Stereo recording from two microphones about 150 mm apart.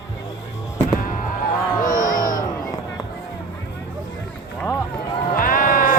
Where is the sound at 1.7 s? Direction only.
60° left (ahead or behind).